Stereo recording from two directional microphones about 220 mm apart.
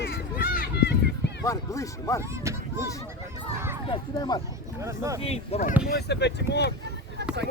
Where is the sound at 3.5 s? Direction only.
10° right (ahead or behind).